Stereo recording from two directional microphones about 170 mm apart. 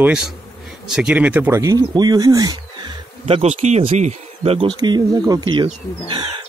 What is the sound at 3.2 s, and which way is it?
Speech, 40° right (ahead or behind).